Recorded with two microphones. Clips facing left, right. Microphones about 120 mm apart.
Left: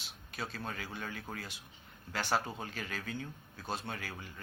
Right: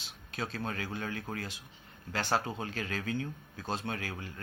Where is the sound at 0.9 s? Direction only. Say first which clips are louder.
Right 5 dB; 45° right (ahead or behind).